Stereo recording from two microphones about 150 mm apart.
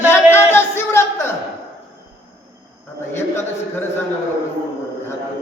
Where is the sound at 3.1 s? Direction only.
15° left (ahead or behind).